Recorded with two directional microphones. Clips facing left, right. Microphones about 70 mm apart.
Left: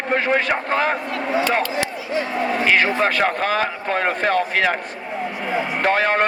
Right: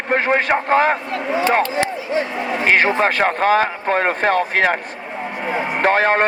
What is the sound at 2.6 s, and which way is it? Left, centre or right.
Speech, right.